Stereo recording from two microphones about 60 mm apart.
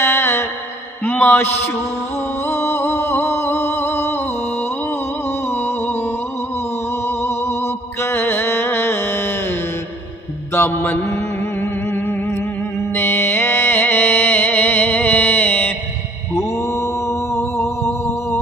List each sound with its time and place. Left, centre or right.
0.0 s music: left
1.0 s speech: left
2.4 s music: left
5.5 s music: left
10.5 s mantra: left
11.6 s music: left
16.6 s a sound: left